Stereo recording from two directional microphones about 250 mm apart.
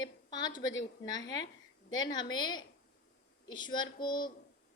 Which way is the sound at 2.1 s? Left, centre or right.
Centre.